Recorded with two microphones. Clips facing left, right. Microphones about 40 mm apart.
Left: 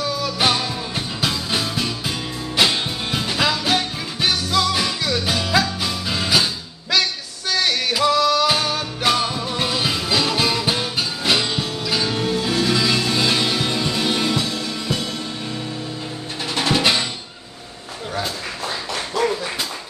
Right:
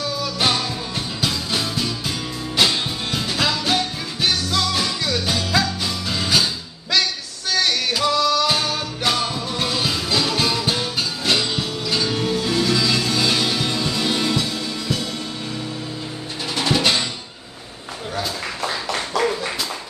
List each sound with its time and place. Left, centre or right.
0.2 s music: centre
14.3 s music: left
16.5 s music: centre